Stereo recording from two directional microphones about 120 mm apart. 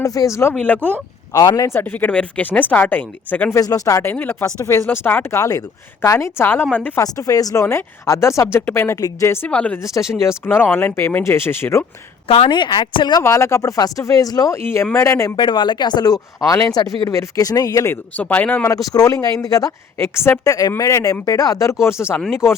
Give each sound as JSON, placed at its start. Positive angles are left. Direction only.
{"t": 0.0, "sound": "a woman's voice", "side_deg": 30}
{"t": 3.6, "sound": "a woman's voice", "side_deg": 30}
{"t": 7.0, "sound": "a woman's voice", "side_deg": 30}
{"t": 9.5, "sound": "speech", "side_deg": 10}
{"t": 9.8, "sound": "a woman's voice", "side_deg": 25}
{"t": 12.5, "sound": "speech", "side_deg": 40}
{"t": 13.2, "sound": "a woman's voice", "side_deg": 25}
{"t": 15.4, "sound": "a woman's voice", "side_deg": 40}
{"t": 18.2, "sound": "speech", "side_deg": 10}
{"t": 18.9, "sound": "a woman's voice", "side_deg": 30}